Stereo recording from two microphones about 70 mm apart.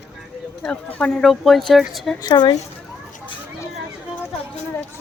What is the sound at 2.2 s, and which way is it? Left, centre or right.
Speech, left.